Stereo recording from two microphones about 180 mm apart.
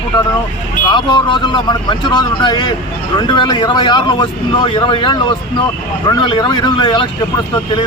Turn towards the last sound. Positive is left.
turn(degrees=25)  # may be behind; listen again after turning